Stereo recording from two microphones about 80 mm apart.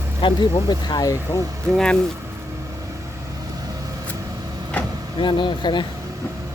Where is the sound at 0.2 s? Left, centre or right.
Left.